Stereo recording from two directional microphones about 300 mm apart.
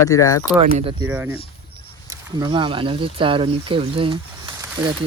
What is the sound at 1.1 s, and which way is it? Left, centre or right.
Speech, centre.